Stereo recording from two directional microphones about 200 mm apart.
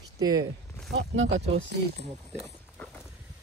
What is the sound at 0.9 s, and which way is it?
Speech, 65° right (ahead or behind).